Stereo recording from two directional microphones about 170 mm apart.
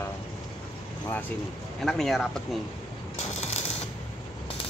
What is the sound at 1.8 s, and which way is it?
Speech, centre (ahead or behind).